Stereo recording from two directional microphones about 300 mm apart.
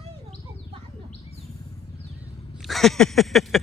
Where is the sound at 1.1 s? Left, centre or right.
Left.